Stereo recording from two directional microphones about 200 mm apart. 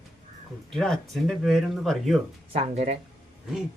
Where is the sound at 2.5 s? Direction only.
30° right (ahead or behind).